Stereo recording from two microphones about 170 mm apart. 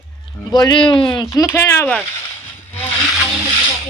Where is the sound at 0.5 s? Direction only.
25° left (ahead or behind).